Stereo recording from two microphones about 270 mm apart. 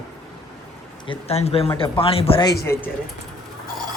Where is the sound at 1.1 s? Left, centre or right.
Left.